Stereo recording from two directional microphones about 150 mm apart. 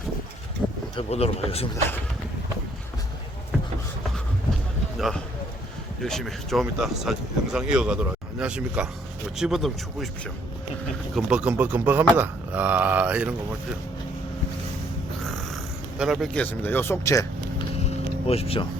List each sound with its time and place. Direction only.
0.9 s speech: 40° left (ahead or behind)
4.9 s speech: centre (ahead or behind)
11.1 s speech: 5° right (ahead or behind)
16.0 s speech: centre (ahead or behind)
16.3 s speech: 10° left (ahead or behind)
18.3 s speech: 40° left (ahead or behind)